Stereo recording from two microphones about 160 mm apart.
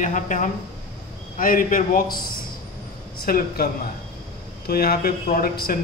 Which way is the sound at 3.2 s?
70° left (ahead or behind).